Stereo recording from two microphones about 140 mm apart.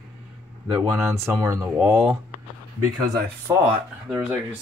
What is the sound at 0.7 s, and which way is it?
Speech, 20° right (ahead or behind).